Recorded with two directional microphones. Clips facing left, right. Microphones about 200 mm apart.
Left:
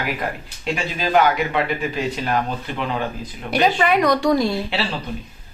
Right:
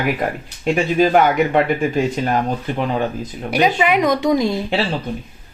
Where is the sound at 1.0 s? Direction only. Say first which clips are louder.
Right 3 dB; 50° right (ahead or behind).